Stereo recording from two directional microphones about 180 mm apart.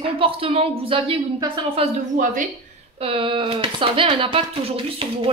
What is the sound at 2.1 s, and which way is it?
Speech, 50° right (ahead or behind).